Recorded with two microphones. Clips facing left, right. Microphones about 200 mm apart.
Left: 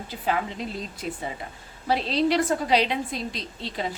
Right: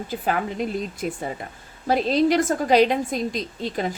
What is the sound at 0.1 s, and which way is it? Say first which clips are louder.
Speech: right 2 dB; 50° right (ahead or behind).